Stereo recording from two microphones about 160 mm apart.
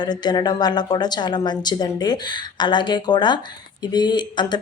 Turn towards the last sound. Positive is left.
turn(degrees=25)  # may be behind; listen again after turning